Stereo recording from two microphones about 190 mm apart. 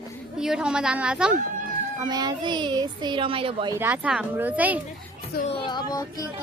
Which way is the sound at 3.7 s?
10° right (ahead or behind).